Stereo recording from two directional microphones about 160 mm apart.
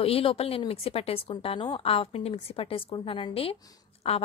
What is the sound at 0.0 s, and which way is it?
A woman's voice, 35° left (ahead or behind).